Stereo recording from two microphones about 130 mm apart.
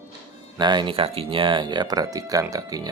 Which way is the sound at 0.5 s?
35° right (ahead or behind).